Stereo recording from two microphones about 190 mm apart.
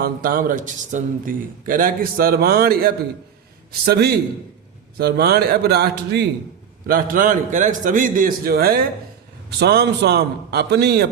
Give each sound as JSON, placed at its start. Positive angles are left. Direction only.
{"t": 0.0, "sound": "a man's voice", "side_deg": -50}
{"t": 6.8, "sound": "a man's voice", "side_deg": -50}